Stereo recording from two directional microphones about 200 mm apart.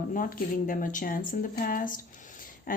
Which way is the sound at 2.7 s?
45° left (ahead or behind).